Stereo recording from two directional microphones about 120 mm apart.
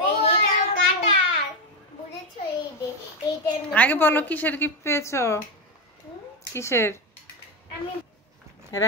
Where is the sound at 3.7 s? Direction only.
15° left (ahead or behind).